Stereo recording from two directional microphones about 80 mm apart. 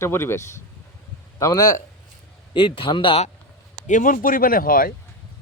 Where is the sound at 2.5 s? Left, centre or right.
Left.